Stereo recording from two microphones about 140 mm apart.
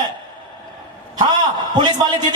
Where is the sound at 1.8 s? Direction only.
30° right (ahead or behind).